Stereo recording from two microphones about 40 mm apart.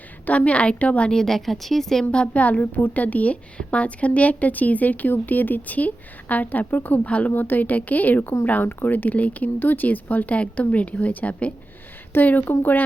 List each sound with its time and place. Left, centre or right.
0.3 s speech: left
1.1 s a woman's voice: centre
2.2 s speech: left
7.4 s speech: left
10.3 s speech: left
12.2 s speech: left